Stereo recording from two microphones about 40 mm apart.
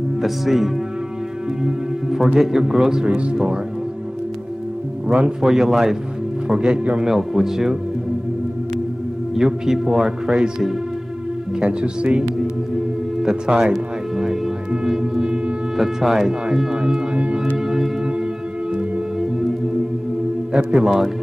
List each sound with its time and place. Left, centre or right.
0.2 s speech: centre
2.0 s a man's voice: centre
3.1 s speech: right
5.4 s a man's voice: centre
6.6 s speech: right
7.1 s a man's voice: centre
9.3 s speech: centre
11.6 s speech: right
13.2 s a man's voice: centre
13.7 s music: centre
15.8 s a man's voice: centre
16.4 s music: centre
17.6 s music: centre
20.5 s a man's voice: centre